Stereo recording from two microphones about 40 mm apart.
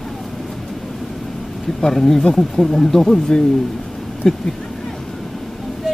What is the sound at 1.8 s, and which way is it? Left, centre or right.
Speech, centre.